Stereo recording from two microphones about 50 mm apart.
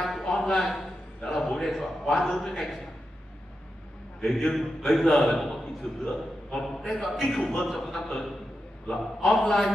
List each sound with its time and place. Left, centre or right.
0.0 s a sound: centre
0.5 s a man's voice: centre
4.2 s a man's voice: centre
6.0 s a man's voice: centre
6.9 s a man's voice: centre